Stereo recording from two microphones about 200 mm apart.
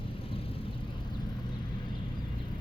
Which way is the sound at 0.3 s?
30° left (ahead or behind).